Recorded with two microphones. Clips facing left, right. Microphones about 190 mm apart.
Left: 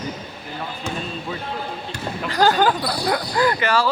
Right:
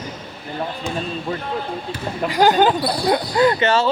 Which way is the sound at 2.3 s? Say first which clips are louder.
Right 2 dB; 15° right (ahead or behind).